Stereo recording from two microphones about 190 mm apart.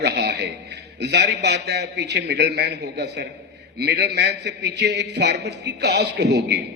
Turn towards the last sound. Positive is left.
turn(degrees=-65)  # may be behind; listen again after turning